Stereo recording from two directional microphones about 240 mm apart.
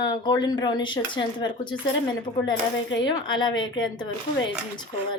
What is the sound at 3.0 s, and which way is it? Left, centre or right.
Speech, centre.